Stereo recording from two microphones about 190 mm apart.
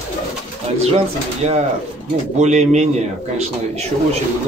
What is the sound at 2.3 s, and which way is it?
Speech, 40° right (ahead or behind).